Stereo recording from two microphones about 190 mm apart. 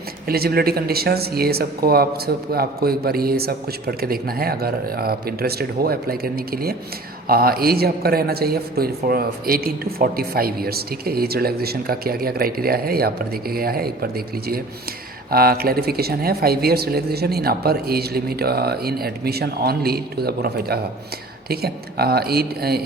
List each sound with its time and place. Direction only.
0.3 s a man's voice: 55° right (ahead or behind)